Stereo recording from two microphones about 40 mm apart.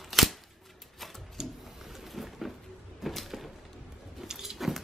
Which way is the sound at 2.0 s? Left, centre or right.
Centre.